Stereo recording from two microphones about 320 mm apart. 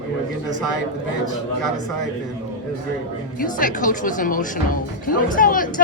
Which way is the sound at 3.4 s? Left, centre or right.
Left.